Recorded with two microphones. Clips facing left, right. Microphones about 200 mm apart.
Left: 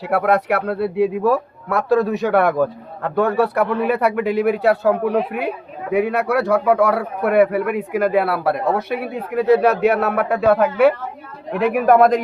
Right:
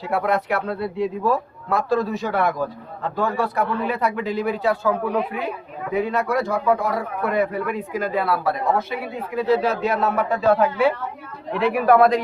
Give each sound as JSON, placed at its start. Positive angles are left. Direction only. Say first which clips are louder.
{"t": 0.1, "sound": "a man's voice", "louder": "left 4 dB", "side_deg": 65}
{"t": 11.5, "sound": "a man's voice", "louder": "left 2 dB", "side_deg": 50}